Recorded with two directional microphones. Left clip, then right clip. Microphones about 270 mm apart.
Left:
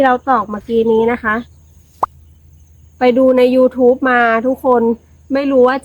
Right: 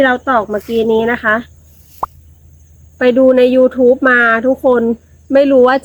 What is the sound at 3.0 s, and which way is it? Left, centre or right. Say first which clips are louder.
A woman's voice: right 2 dB; centre.